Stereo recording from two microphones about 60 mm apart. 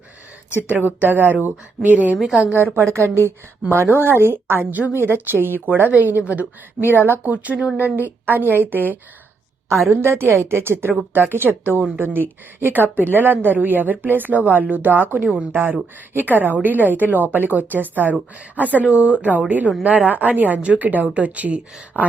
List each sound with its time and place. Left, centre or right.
0.7 s a woman's voice: right
2.7 s a woman's voice: right
3.7 s a woman's voice: right
9.9 s a woman's voice: right